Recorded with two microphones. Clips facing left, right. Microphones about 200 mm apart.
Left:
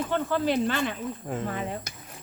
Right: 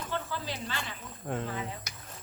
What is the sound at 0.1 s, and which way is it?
Speech, 60° left (ahead or behind).